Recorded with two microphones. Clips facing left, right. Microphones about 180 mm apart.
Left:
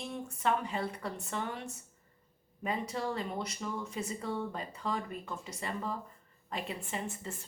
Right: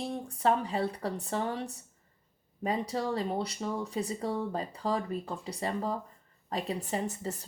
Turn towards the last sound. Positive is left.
turn(degrees=-40)  # may be behind; listen again after turning